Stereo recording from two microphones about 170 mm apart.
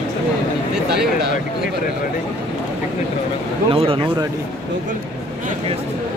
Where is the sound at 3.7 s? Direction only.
35° right (ahead or behind).